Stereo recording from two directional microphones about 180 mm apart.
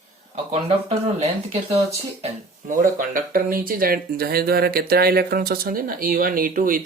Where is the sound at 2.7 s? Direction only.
50° right (ahead or behind).